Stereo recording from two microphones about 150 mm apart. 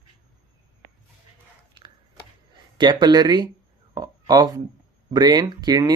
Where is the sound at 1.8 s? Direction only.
35° right (ahead or behind).